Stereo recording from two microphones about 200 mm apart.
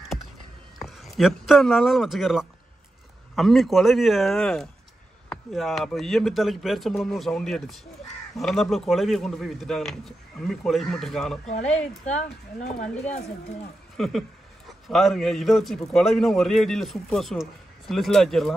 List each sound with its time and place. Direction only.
0.7 s a man's voice: centre (ahead or behind)
12.2 s speech: 35° left (ahead or behind)
12.8 s a man's voice: 5° left (ahead or behind)